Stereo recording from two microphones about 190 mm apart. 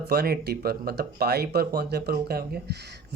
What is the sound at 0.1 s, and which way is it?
Speech, 55° right (ahead or behind).